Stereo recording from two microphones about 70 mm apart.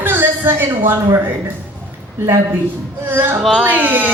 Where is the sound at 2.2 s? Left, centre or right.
Right.